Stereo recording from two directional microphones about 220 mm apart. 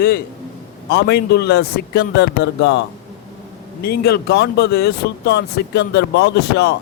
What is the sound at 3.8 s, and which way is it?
Speech, 45° left (ahead or behind).